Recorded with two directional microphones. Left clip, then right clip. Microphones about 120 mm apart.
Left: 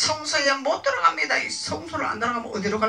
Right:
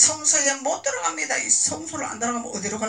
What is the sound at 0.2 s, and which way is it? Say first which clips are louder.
Speech: left 1 dB; 50° right (ahead or behind).